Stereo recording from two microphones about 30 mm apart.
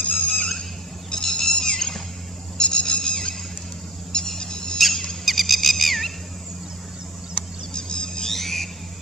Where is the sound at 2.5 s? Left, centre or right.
Left.